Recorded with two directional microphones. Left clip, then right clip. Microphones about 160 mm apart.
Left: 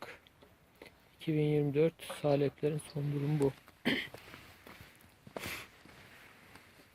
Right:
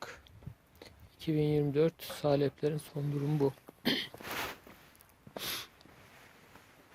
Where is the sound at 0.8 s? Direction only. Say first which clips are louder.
Right 1 dB; 65° right (ahead or behind).